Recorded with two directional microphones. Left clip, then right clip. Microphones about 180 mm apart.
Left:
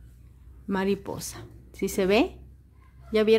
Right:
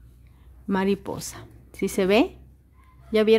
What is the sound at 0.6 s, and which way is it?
A woman's voice, 15° right (ahead or behind).